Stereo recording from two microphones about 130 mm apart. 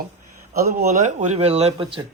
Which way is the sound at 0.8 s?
60° right (ahead or behind).